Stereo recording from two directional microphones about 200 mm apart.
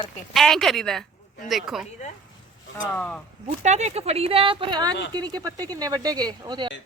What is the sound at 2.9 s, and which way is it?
Speech, 5° left (ahead or behind).